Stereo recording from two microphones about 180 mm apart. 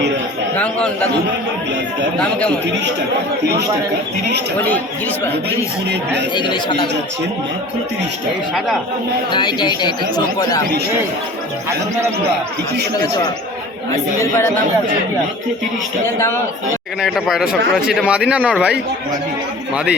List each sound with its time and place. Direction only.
0.5 s speech: 5° left (ahead or behind)
6.3 s speech: 25° left (ahead or behind)
9.3 s speech: 25° left (ahead or behind)
13.9 s speech: 15° left (ahead or behind)
17.0 s speech: centre (ahead or behind)
19.7 s speech: 5° right (ahead or behind)